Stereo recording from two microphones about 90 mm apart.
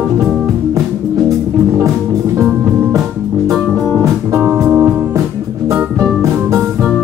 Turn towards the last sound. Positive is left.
turn(degrees=-25)  # may be behind; listen again after turning